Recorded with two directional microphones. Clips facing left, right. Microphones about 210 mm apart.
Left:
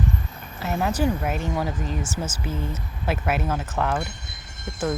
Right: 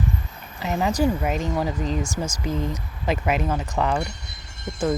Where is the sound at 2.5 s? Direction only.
15° right (ahead or behind).